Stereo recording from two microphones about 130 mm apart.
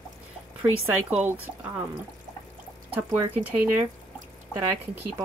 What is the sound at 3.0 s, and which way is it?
Speech, 15° right (ahead or behind).